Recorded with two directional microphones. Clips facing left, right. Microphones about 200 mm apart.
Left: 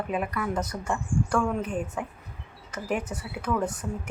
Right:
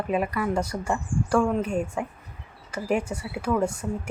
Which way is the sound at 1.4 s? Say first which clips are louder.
Right 4 dB; 25° right (ahead or behind).